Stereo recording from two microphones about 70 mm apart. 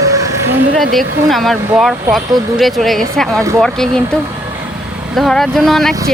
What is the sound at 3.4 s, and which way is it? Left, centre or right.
Speech, right.